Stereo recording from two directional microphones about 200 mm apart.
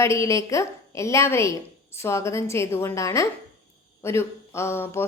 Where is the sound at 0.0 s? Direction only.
15° left (ahead or behind).